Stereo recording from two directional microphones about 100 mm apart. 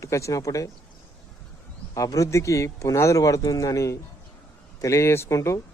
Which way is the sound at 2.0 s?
35° left (ahead or behind).